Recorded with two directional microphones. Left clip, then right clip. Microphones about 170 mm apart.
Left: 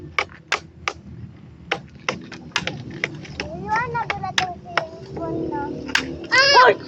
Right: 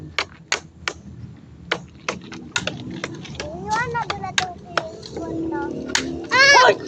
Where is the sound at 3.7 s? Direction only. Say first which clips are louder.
Even; 15° left (ahead or behind).